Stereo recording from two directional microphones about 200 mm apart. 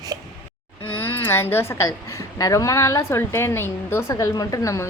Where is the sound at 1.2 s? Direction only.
10° left (ahead or behind).